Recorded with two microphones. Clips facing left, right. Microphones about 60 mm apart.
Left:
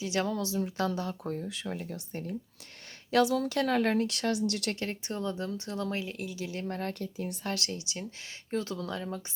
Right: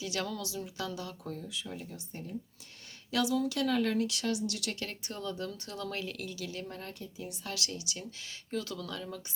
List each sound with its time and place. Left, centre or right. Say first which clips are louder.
0.0 s speech: left 5 dB; left
3.1 s speech: left 4 dB; left
6.7 s speech: left 8 dB; left